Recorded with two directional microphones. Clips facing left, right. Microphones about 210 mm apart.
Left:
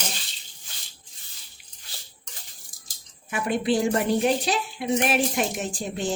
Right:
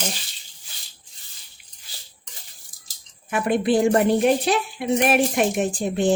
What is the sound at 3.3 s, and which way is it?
A woman's voice, 55° right (ahead or behind).